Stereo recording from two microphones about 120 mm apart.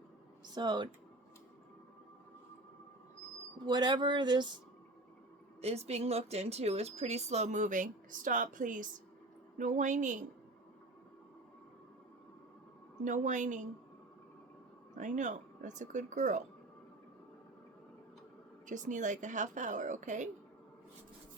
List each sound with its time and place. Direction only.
0.5 s a sound: 40° right (ahead or behind)
3.7 s a sound: 40° right (ahead or behind)
5.6 s a woman's voice: 60° right (ahead or behind); by 10.2 s 90° right
13.1 s a woman's voice: 90° right
14.9 s a woman's voice: 90° right
18.6 s a woman's voice: 90° right